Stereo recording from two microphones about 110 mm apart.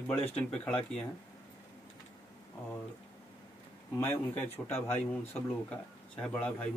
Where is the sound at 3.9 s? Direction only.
15° left (ahead or behind).